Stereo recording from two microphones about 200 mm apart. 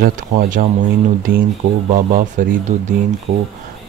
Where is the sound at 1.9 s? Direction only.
45° right (ahead or behind).